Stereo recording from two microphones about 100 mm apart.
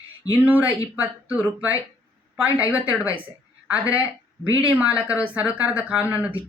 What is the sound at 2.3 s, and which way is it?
Speech, 15° right (ahead or behind).